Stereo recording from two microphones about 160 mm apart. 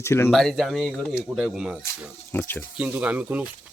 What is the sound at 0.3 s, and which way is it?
Speech, centre (ahead or behind).